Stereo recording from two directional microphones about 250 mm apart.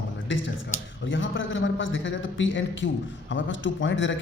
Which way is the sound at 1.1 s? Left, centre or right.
Left.